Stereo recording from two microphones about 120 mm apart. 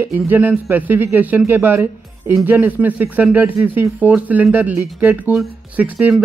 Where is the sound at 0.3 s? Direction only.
15° right (ahead or behind).